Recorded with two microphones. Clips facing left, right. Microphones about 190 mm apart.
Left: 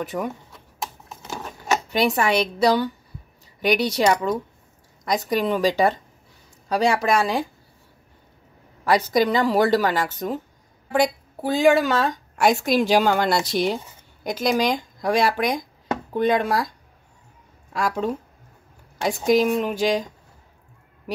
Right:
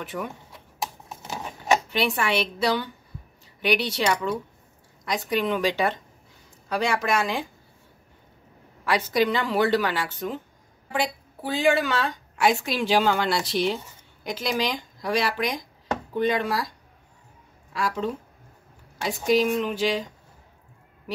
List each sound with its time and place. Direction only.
0.0 s speech: 40° left (ahead or behind)
1.3 s a sound: 15° right (ahead or behind)
1.9 s speech: 40° left (ahead or behind)
8.8 s a woman's voice: 40° left (ahead or behind)
17.7 s a woman's voice: 50° left (ahead or behind)